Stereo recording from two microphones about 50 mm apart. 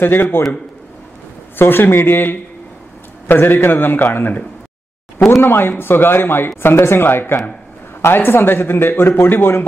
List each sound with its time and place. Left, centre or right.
0.0 s a man's voice: left
1.6 s a man's voice: left
5.4 s a man's voice: left